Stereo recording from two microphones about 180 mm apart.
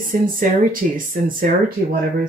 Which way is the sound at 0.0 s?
50° right (ahead or behind).